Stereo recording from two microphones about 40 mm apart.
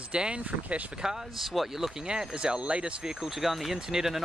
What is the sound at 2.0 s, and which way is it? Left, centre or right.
Speech, right.